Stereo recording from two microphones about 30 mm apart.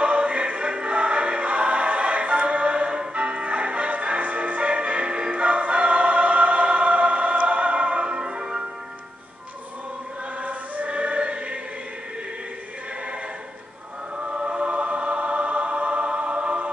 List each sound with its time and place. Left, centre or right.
0.0 s choir: right
5.3 s music: right
8.2 s music: right
10.4 s music: right
14.1 s choir: right
14.5 s music: right